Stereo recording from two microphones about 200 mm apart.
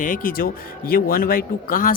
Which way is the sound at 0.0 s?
45° left (ahead or behind).